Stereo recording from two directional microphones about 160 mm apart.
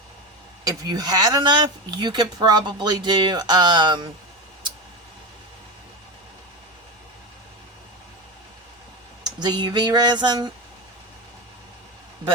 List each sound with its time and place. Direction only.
0.6 s speech: 25° right (ahead or behind)
9.4 s speech: 25° right (ahead or behind)